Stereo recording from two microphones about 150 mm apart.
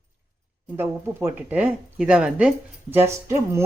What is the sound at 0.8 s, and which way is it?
Speech, 15° right (ahead or behind).